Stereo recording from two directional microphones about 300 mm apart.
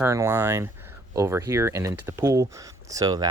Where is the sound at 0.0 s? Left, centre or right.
Centre.